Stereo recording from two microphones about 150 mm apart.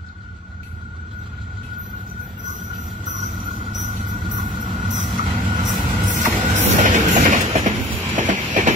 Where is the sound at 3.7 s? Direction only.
45° right (ahead or behind).